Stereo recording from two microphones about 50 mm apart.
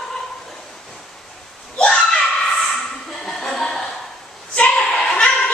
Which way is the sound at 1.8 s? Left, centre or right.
Centre.